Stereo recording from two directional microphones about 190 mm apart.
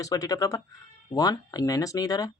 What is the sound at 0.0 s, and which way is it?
Speech, 20° left (ahead or behind).